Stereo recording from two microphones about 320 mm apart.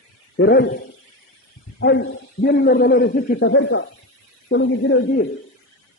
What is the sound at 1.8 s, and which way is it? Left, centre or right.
A man's voice, left.